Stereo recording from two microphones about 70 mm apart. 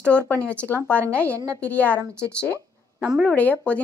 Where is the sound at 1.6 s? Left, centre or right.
Left.